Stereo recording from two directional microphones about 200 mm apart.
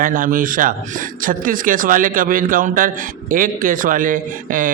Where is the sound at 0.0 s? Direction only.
45° right (ahead or behind).